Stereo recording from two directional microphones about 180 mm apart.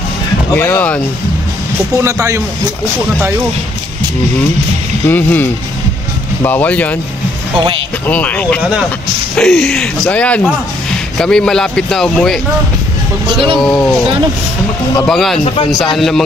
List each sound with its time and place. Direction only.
0.5 s speech: 10° left (ahead or behind)
2.0 s speech: 15° right (ahead or behind)
5.0 s speech: 10° left (ahead or behind)
8.1 s speech: 10° left (ahead or behind)
13.3 s speech: 30° right (ahead or behind)
13.6 s speech: 5° left (ahead or behind)
15.0 s speech: centre (ahead or behind)
15.4 s speech: 30° left (ahead or behind)
15.7 s speech: centre (ahead or behind)